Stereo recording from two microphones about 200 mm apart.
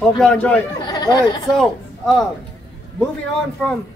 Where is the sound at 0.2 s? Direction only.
5° left (ahead or behind).